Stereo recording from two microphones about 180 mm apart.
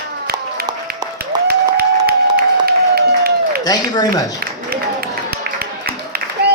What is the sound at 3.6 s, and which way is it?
Speech, 20° left (ahead or behind).